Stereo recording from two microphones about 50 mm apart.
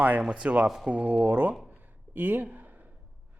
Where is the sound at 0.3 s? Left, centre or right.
Right.